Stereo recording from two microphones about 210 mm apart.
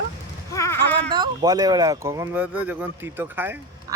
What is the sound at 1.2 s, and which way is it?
Speech, 20° right (ahead or behind).